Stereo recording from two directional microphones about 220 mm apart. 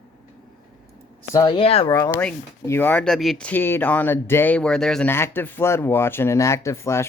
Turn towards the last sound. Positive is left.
turn(degrees=15)  # may be behind; listen again after turning